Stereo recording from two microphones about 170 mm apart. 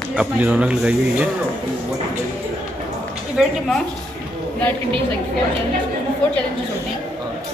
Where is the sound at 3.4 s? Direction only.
Centre (ahead or behind).